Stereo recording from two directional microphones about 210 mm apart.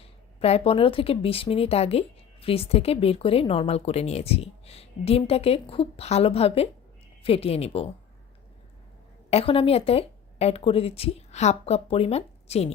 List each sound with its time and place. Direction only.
0.0 s speech: 30° left (ahead or behind)
9.3 s speech: 30° left (ahead or behind)